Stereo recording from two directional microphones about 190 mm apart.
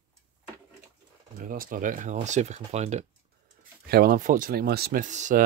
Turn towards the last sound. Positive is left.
turn(degrees=-40)  # may be behind; listen again after turning